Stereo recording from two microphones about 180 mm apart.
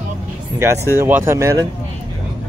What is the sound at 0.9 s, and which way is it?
Speech, 10° right (ahead or behind).